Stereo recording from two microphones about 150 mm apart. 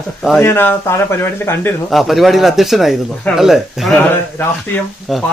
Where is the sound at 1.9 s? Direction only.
Centre (ahead or behind).